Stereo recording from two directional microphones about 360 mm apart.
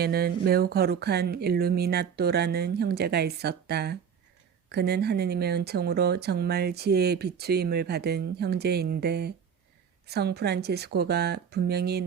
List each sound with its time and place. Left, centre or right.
0.0 s speech: right